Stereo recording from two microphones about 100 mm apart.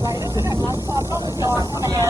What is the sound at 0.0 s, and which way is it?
Vehicle, 35° right (ahead or behind).